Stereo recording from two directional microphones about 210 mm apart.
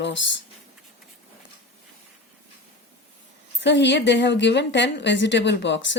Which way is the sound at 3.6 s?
55° left (ahead or behind).